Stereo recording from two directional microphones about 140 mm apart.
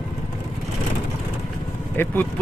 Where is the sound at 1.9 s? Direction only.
15° left (ahead or behind).